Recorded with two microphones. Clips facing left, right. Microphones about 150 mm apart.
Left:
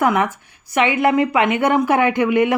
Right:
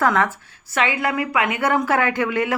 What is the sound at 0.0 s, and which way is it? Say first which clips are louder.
A woman's voice: left 2 dB; 15° left (ahead or behind).